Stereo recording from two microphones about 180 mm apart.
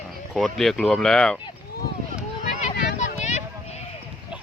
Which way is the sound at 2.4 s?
40° left (ahead or behind).